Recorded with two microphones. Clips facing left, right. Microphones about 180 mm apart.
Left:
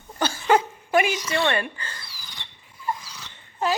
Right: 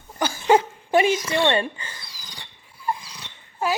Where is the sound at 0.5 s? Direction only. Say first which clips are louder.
Right 2 dB; 30° right (ahead or behind).